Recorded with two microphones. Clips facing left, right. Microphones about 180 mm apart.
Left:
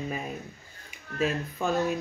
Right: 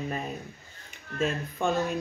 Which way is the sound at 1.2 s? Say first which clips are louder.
Even; 5° left (ahead or behind).